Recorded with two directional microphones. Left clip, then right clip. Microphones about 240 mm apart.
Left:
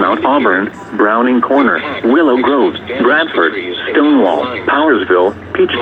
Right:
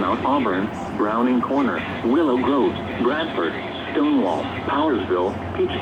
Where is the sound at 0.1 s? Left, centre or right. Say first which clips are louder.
Left 9 dB; left.